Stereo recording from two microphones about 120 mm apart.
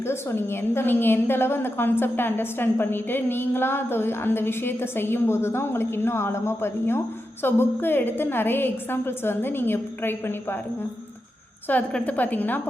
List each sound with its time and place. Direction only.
0.0 s a woman's voice: 20° left (ahead or behind)
11.7 s a woman's voice: 10° left (ahead or behind)